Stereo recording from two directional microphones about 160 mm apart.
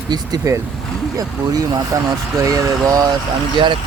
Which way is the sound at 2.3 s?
20° right (ahead or behind).